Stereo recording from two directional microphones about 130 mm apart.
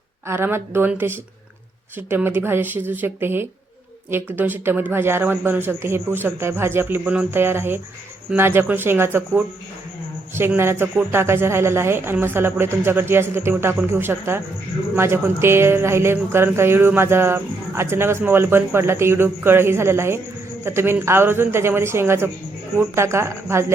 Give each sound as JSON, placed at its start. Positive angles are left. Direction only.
{"t": 0.3, "sound": "a man's voice", "side_deg": -20}